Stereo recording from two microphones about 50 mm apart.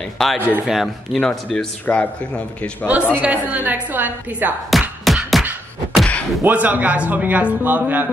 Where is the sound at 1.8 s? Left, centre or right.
Left.